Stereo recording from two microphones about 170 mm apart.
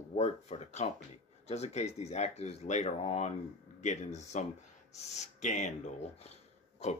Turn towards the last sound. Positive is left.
turn(degrees=40)  # may be behind; listen again after turning